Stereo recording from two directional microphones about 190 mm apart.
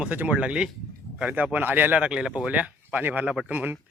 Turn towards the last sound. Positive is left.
turn(degrees=-5)  # may be behind; listen again after turning